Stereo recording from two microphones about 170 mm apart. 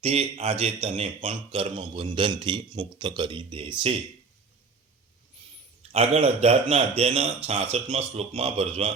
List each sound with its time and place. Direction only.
0.0 s a man's voice: 35° right (ahead or behind)
5.9 s a man's voice: 35° right (ahead or behind)